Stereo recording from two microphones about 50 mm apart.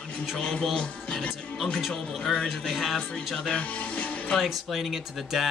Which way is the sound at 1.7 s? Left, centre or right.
Centre.